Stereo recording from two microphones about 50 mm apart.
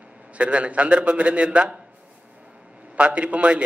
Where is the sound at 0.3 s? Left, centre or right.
Right.